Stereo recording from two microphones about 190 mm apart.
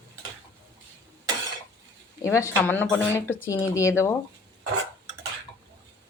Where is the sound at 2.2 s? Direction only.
15° left (ahead or behind).